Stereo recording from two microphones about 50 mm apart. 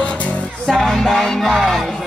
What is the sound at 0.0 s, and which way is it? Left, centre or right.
Music, left.